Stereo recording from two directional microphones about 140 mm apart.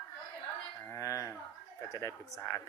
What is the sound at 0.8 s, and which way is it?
Speech, 20° left (ahead or behind).